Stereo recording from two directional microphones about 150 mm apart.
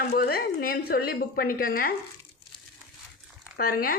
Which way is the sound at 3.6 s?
75° left (ahead or behind).